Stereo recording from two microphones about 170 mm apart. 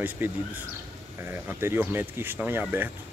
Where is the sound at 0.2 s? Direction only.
10° right (ahead or behind).